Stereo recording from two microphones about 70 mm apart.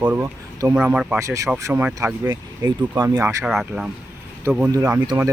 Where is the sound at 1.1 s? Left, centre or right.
Right.